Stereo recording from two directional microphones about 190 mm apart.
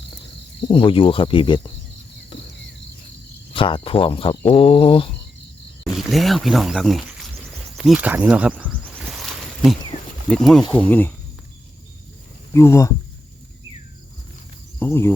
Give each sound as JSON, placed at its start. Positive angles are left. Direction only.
{"t": 0.7, "sound": "speech", "side_deg": 25}
{"t": 2.3, "sound": "cricket", "side_deg": 25}
{"t": 3.5, "sound": "speech", "side_deg": 25}
{"t": 5.8, "sound": "speech", "side_deg": 0}
{"t": 7.8, "sound": "a sound", "side_deg": -5}
{"t": 10.2, "sound": "speech", "side_deg": 5}
{"t": 12.5, "sound": "speech", "side_deg": 15}
{"t": 14.8, "sound": "speech", "side_deg": 15}